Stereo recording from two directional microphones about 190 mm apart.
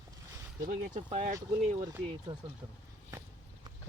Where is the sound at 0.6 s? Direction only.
45° right (ahead or behind).